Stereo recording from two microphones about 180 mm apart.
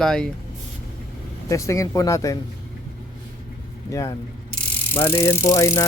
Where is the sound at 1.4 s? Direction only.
15° left (ahead or behind).